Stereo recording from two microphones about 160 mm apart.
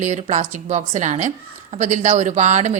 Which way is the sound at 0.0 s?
45° right (ahead or behind).